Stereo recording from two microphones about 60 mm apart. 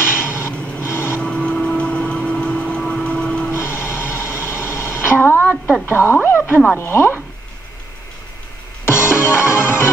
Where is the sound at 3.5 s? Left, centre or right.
Left.